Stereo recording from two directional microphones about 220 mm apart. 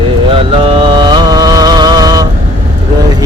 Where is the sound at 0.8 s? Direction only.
20° right (ahead or behind).